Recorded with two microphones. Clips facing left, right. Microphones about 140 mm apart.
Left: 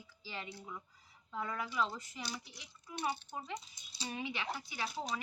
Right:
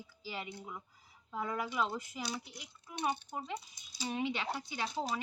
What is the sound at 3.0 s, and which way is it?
Speech, 20° right (ahead or behind).